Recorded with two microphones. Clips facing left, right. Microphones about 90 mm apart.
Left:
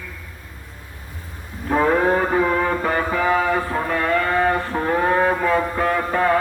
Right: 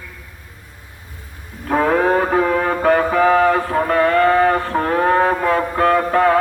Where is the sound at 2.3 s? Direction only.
60° right (ahead or behind).